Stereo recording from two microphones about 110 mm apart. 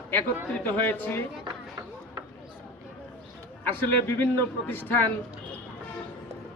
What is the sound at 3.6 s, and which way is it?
Speech, 20° left (ahead or behind).